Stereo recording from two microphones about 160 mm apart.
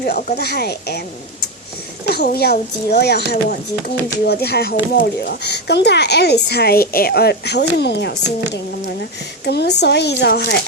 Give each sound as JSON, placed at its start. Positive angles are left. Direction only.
{"t": 0.0, "sound": "speech", "side_deg": 70}
{"t": 0.3, "sound": "speech", "side_deg": 90}
{"t": 2.1, "sound": "speech", "side_deg": 80}
{"t": 9.4, "sound": "speech", "side_deg": 90}